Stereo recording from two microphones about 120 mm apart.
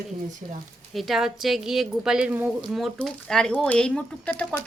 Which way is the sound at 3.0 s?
5° left (ahead or behind).